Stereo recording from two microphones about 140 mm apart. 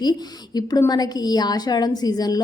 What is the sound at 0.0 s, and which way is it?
A woman's voice, 30° left (ahead or behind).